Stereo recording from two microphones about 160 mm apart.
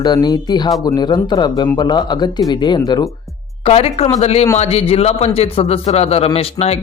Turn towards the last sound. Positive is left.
turn(degrees=40)  # may be behind; listen again after turning